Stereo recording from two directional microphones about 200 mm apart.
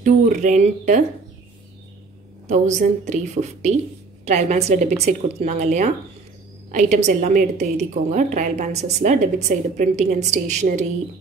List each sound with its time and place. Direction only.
0.0 s a woman's voice: 40° right (ahead or behind)
2.4 s a woman's voice: 35° right (ahead or behind)